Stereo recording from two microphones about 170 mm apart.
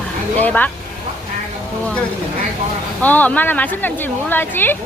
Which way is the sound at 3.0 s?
10° left (ahead or behind).